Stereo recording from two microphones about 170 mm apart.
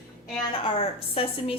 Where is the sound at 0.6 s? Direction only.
35° left (ahead or behind).